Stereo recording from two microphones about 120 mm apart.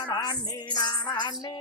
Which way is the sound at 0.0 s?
35° left (ahead or behind).